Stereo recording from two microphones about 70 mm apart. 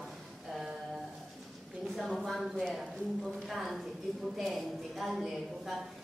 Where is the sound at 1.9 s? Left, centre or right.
Centre.